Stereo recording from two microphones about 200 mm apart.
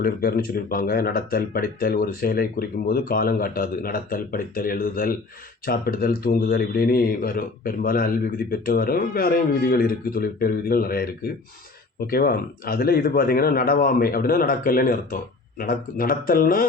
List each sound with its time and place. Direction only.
0.0 s speech: 50° left (ahead or behind)